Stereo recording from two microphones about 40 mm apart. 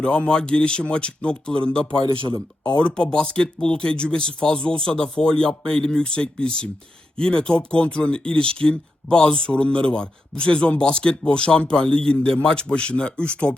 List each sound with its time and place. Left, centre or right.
0.0 s speech: left